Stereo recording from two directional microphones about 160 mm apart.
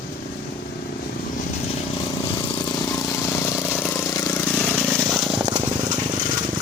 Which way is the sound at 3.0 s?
20° left (ahead or behind).